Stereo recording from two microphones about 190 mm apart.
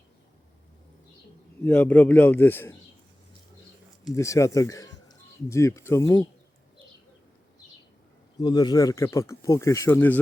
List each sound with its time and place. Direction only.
1.6 s speech: 10° left (ahead or behind)
4.1 s speech: 15° left (ahead or behind)
8.4 s speech: 20° left (ahead or behind)